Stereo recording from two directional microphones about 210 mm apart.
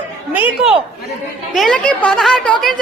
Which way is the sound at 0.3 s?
10° right (ahead or behind).